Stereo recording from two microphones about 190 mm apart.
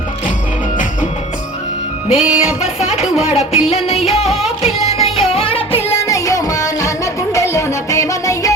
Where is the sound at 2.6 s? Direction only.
35° left (ahead or behind).